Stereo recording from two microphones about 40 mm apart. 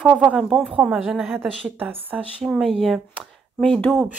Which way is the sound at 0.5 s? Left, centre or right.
Centre.